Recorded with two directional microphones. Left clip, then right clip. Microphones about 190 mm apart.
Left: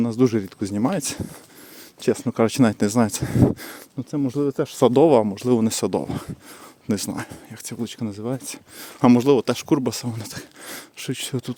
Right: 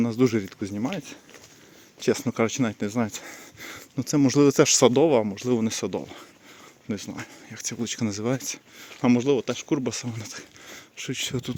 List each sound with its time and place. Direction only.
0.0 s speech: 15° left (ahead or behind)
0.6 s speech: 30° left (ahead or behind)
2.0 s speech: 15° left (ahead or behind)
3.9 s speech: centre (ahead or behind)
4.3 s speech: 15° right (ahead or behind)
4.8 s speech: 20° left (ahead or behind)
7.5 s speech: 20° left (ahead or behind)
8.8 s speech: 35° left (ahead or behind)
10.7 s speech: 35° left (ahead or behind); by 11.5 s 20° left (ahead or behind)